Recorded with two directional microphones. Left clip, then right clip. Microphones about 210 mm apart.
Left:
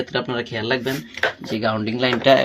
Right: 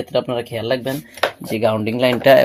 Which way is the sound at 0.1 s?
40° right (ahead or behind).